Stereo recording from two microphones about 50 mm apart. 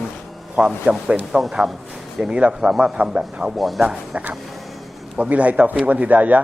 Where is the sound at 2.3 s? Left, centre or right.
Right.